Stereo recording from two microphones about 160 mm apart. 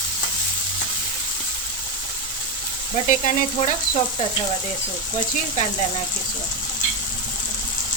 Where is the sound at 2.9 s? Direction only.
50° left (ahead or behind).